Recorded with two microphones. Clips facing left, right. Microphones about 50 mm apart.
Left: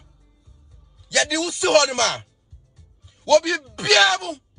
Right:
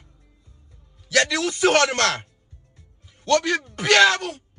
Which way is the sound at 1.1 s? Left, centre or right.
Right.